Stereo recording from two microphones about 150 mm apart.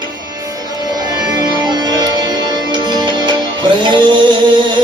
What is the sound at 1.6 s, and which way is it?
Music, 25° right (ahead or behind).